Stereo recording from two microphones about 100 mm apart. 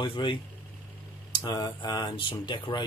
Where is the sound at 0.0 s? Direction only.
60° left (ahead or behind).